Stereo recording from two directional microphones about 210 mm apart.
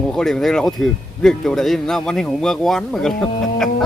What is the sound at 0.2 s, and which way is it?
A man's voice, 5° left (ahead or behind).